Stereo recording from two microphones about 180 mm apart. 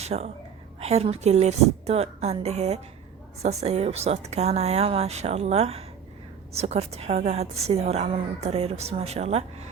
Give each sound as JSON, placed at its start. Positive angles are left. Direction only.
{"t": 0.0, "sound": "a woman's voice", "side_deg": -35}